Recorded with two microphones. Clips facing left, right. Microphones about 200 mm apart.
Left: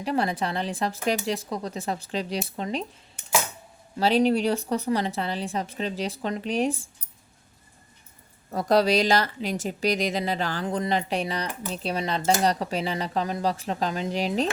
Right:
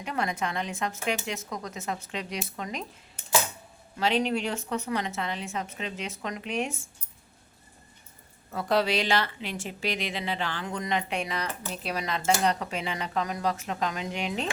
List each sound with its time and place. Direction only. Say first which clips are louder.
0.0 s a woman's voice: left 5 dB; 35° left (ahead or behind)
3.9 s a woman's voice: left 5 dB; 35° left (ahead or behind)
8.5 s a woman's voice: left 5 dB; 40° left (ahead or behind)